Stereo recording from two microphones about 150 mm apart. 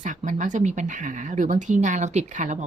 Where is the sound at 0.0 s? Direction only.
55° right (ahead or behind).